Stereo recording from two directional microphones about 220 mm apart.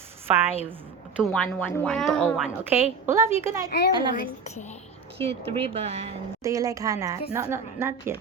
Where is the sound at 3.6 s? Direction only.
50° left (ahead or behind).